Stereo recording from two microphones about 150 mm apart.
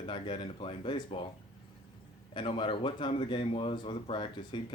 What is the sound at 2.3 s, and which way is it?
A man's voice, 35° left (ahead or behind).